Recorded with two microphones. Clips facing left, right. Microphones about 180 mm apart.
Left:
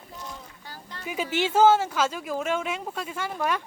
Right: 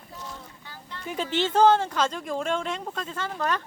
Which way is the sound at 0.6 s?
40° left (ahead or behind).